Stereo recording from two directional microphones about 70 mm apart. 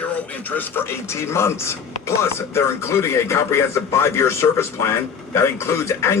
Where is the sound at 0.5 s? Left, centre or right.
Left.